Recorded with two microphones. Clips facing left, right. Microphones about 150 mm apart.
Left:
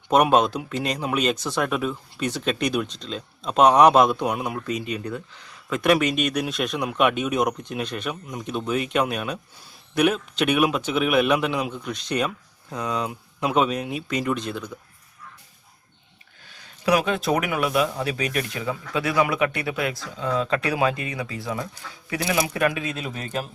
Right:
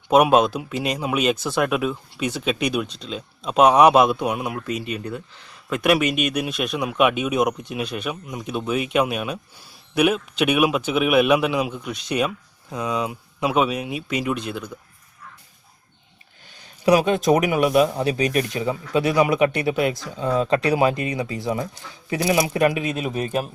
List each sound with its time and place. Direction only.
0.1 s a man's voice: 5° right (ahead or behind)
17.1 s speech: 20° right (ahead or behind)